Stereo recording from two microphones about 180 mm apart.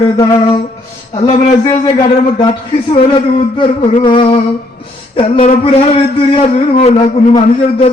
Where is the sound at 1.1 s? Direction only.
35° left (ahead or behind).